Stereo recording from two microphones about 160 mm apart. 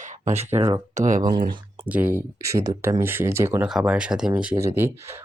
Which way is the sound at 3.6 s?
5° right (ahead or behind).